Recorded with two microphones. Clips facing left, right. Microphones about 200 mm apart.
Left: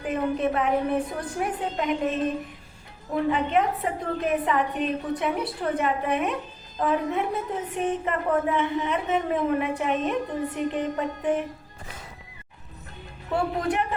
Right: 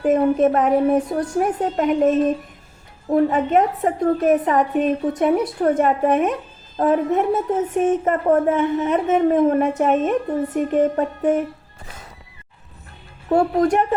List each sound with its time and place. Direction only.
0.0 s a woman's voice: 45° right (ahead or behind)
3.2 s a woman's voice: 45° right (ahead or behind)
13.3 s a woman's voice: 45° right (ahead or behind)